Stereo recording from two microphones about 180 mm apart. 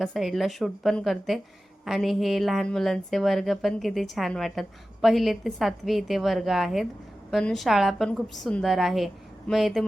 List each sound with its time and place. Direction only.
0.0 s a woman's voice: centre (ahead or behind)